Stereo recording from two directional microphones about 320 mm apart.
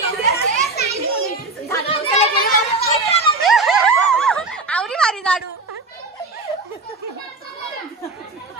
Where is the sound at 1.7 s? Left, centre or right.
Centre.